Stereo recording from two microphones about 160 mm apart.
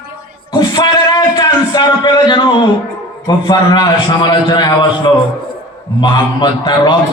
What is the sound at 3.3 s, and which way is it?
A man's voice, 25° left (ahead or behind).